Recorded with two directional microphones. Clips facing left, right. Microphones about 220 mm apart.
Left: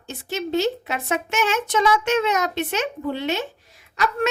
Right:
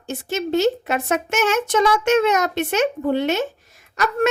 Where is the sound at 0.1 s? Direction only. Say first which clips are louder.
Right 3 dB; 45° right (ahead or behind).